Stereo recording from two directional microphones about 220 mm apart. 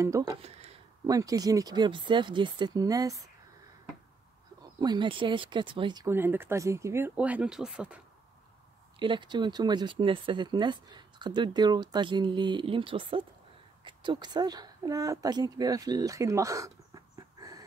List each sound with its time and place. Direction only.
0.0 s speech: 15° right (ahead or behind)
0.4 s a sound: 30° right (ahead or behind)
1.0 s speech: 15° right (ahead or behind)
4.7 s speech: 20° right (ahead or behind)
9.0 s speech: 20° right (ahead or behind)